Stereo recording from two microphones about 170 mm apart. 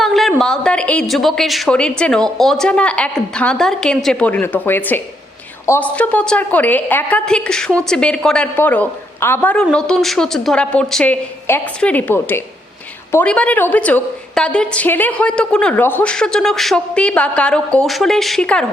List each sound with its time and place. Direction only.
0.0 s a woman's voice: centre (ahead or behind)